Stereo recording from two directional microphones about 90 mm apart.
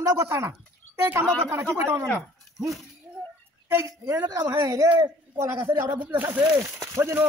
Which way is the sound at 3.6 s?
35° right (ahead or behind).